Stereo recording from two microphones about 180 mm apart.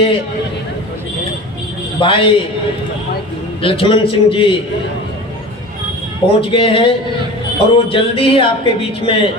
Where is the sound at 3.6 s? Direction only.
30° left (ahead or behind).